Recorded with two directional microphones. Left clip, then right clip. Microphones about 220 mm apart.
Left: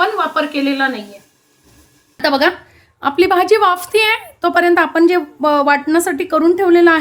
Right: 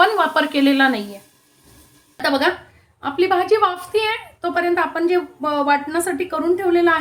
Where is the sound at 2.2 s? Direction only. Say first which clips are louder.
Left 4 dB; 40° left (ahead or behind).